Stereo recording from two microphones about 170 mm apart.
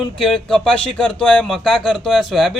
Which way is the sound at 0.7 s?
30° left (ahead or behind).